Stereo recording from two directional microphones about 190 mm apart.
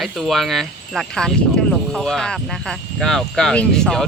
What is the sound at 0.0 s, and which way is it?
Speech, centre (ahead or behind).